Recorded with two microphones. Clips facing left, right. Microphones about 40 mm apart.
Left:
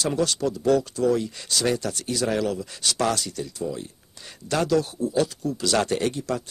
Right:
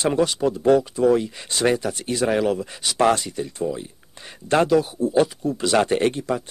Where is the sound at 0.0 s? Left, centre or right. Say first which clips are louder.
Right 4 dB; right.